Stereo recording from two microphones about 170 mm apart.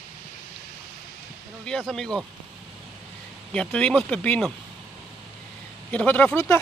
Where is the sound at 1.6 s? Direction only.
5° left (ahead or behind).